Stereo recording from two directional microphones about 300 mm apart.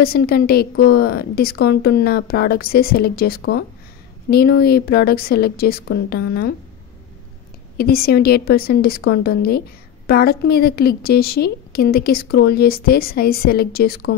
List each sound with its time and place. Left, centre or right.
0.0 s a woman's voice: left
7.7 s a woman's voice: left